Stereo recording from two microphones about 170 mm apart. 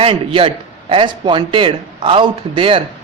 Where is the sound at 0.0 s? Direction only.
35° right (ahead or behind).